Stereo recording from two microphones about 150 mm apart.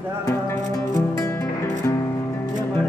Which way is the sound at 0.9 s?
25° left (ahead or behind).